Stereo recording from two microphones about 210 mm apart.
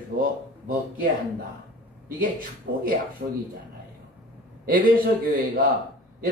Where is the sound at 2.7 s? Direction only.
55° right (ahead or behind).